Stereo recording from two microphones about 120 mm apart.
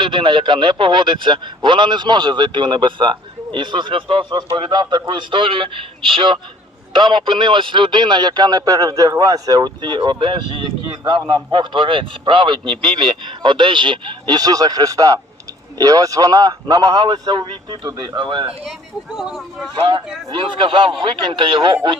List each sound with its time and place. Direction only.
0.0 s a man's voice: 45° right (ahead or behind)
17.8 s speech: 30° right (ahead or behind)
18.2 s speech: 40° right (ahead or behind)
19.1 s speech: centre (ahead or behind)
20.3 s a man's voice: 45° right (ahead or behind)